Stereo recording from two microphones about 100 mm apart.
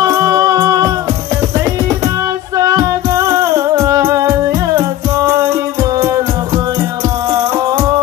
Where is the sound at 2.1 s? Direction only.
35° right (ahead or behind).